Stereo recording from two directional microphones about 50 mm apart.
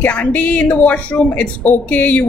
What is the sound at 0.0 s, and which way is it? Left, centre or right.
Speech, left.